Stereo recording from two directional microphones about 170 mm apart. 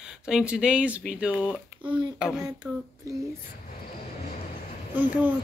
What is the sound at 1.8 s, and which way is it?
Speech, 30° right (ahead or behind).